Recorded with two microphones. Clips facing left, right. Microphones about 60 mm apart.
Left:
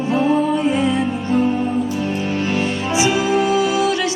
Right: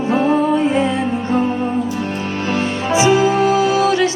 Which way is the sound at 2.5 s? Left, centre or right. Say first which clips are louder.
Right 6 dB; right.